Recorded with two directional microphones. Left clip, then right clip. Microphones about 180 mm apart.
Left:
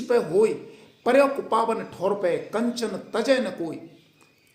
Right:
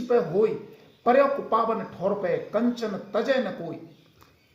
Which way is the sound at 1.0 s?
40° left (ahead or behind).